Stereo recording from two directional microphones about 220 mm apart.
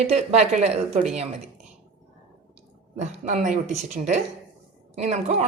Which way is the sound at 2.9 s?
30° right (ahead or behind).